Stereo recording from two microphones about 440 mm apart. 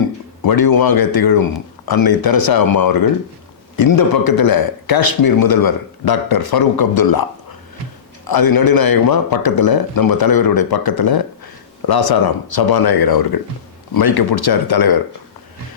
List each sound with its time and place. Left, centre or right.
0.4 s a man's voice: left
8.3 s a man's voice: left